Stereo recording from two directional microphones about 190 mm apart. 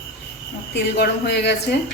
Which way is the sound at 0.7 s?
60° left (ahead or behind).